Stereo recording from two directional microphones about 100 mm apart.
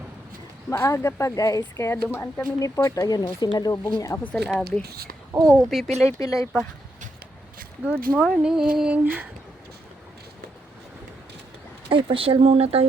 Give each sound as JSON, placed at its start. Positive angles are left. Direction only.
{"t": 0.7, "sound": "speech", "side_deg": 30}
{"t": 2.6, "sound": "speech", "side_deg": 35}
{"t": 4.2, "sound": "speech", "side_deg": 15}
{"t": 5.4, "sound": "speech", "side_deg": 0}
{"t": 6.1, "sound": "speech", "side_deg": 35}
{"t": 7.9, "sound": "a sound", "side_deg": -15}
{"t": 11.9, "sound": "speech", "side_deg": -55}